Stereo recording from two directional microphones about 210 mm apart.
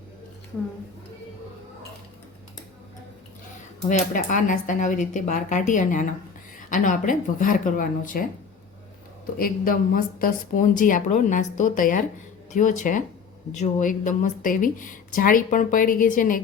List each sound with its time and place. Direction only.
3.8 s speech: 40° left (ahead or behind)
9.4 s speech: 45° left (ahead or behind)